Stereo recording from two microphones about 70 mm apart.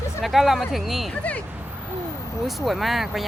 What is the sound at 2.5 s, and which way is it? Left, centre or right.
Speech, centre.